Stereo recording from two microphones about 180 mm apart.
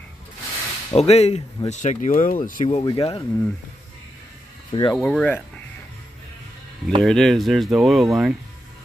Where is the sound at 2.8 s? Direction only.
30° left (ahead or behind).